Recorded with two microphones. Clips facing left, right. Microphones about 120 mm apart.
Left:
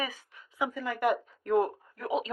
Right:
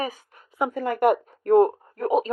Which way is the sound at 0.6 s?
55° right (ahead or behind).